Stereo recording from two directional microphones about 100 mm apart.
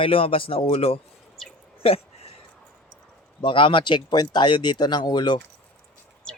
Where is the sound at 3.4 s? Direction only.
55° left (ahead or behind).